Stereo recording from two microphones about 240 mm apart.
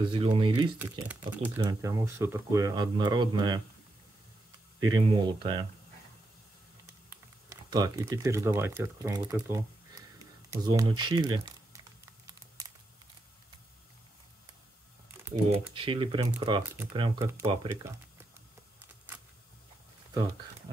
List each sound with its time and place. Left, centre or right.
0.1 s speech: right
0.7 s speech: centre
4.7 s speech: centre
7.1 s speech: centre
12.3 s crumpling: centre
15.2 s speech: centre
15.7 s speech: right